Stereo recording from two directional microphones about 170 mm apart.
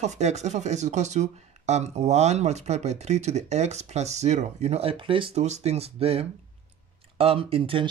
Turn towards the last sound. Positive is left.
turn(degrees=-30)  # may be behind; listen again after turning